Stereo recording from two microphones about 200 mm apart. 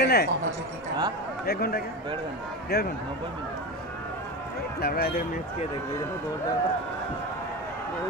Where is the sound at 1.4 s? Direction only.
50° left (ahead or behind).